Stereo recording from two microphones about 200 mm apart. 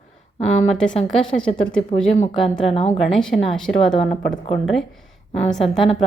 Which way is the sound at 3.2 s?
5° left (ahead or behind).